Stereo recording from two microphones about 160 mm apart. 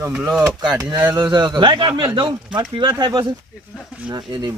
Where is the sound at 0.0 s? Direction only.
10° right (ahead or behind).